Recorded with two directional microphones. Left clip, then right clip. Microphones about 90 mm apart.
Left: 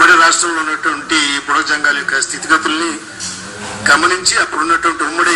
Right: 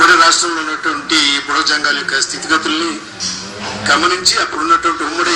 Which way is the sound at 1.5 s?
15° right (ahead or behind).